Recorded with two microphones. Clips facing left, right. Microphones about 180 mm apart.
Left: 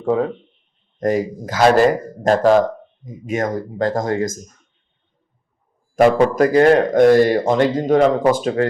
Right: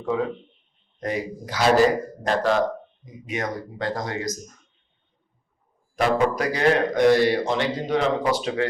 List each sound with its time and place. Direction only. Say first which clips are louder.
0.0 s speech: left 6 dB; 50° left (ahead or behind)
6.0 s speech: left 8 dB; 50° left (ahead or behind)